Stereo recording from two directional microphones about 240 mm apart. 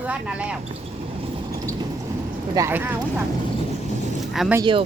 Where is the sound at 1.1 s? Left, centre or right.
Right.